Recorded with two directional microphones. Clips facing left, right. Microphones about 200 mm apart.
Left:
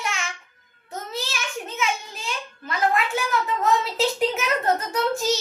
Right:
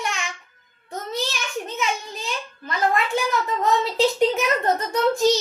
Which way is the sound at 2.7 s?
5° left (ahead or behind).